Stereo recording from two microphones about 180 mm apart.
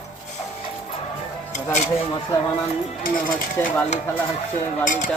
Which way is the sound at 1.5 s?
40° left (ahead or behind).